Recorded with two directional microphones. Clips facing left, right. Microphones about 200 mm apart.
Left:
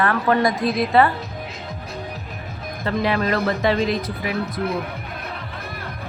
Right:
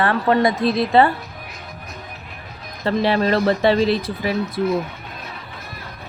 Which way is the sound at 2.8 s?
30° right (ahead or behind).